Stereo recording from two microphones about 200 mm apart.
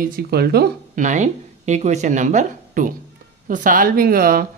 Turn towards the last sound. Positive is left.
turn(degrees=-45)  # may be behind; listen again after turning